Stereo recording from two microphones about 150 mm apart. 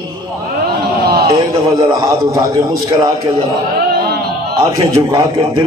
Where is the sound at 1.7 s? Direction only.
20° right (ahead or behind).